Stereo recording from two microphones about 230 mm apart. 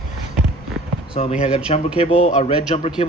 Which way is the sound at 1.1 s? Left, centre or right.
Left.